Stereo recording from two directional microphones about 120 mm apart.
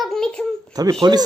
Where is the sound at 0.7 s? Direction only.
30° right (ahead or behind).